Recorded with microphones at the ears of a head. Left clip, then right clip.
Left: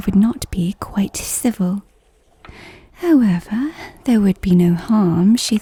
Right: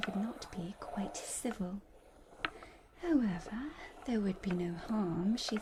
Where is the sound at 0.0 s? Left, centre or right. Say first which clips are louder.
Left 19 dB; left.